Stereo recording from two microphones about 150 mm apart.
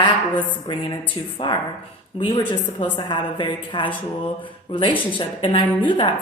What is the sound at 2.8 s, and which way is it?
A woman's voice, 35° left (ahead or behind).